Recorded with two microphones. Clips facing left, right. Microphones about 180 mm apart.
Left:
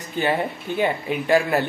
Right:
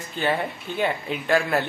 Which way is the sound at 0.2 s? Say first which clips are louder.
Left 2 dB; 15° left (ahead or behind).